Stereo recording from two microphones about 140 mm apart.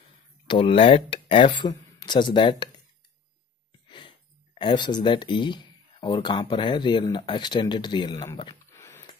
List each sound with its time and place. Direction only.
0.5 s speech: 40° left (ahead or behind)
4.6 s speech: 35° left (ahead or behind)
8.6 s a sound: 20° left (ahead or behind)